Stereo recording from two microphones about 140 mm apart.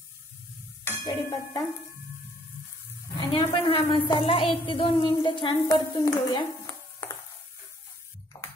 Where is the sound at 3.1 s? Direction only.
40° left (ahead or behind).